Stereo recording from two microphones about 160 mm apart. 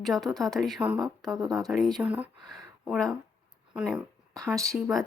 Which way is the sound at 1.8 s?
25° right (ahead or behind).